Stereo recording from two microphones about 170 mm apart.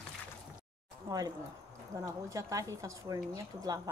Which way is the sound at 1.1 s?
20° right (ahead or behind).